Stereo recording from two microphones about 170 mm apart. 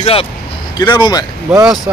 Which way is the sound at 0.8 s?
25° left (ahead or behind).